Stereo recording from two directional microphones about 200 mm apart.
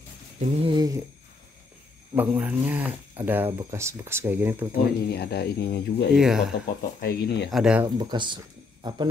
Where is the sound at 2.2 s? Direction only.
10° right (ahead or behind).